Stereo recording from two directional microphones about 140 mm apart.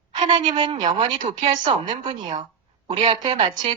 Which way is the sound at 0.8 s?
55° right (ahead or behind).